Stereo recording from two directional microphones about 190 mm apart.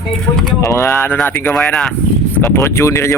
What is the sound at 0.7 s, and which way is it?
Speech, 15° left (ahead or behind).